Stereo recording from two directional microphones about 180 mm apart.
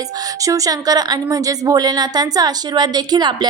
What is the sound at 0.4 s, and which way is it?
A woman's voice, 20° right (ahead or behind).